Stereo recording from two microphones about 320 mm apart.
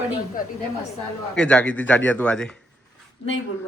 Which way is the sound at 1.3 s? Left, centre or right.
Centre.